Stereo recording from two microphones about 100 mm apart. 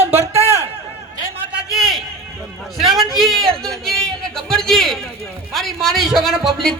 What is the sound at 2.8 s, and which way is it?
A man's voice, centre (ahead or behind).